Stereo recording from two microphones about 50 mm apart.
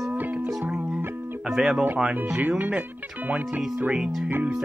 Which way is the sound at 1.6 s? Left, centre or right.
Centre.